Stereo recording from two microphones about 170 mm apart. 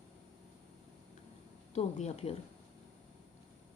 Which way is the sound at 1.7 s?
40° left (ahead or behind).